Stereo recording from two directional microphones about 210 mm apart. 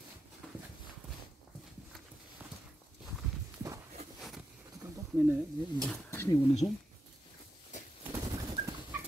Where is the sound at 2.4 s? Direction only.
Centre (ahead or behind).